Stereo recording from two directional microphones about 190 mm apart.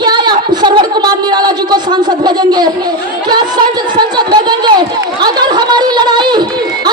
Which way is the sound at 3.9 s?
25° right (ahead or behind).